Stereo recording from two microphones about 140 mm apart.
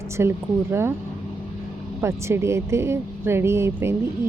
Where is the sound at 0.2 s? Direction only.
15° right (ahead or behind).